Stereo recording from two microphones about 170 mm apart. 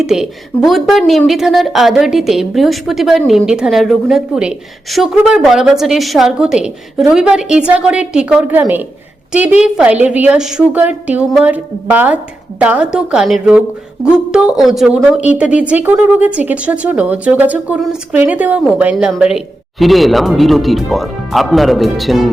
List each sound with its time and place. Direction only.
0.0 s a woman's voice: 5° right (ahead or behind)